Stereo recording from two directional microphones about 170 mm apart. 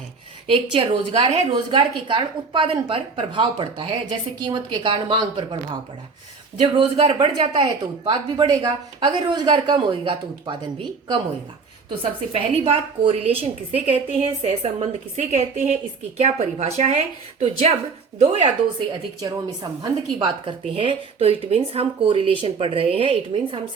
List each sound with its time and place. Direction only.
0.5 s a woman's voice: 35° right (ahead or behind)
6.6 s a woman's voice: 35° right (ahead or behind)
11.9 s a woman's voice: 30° right (ahead or behind)
19.8 s a woman's voice: 25° right (ahead or behind)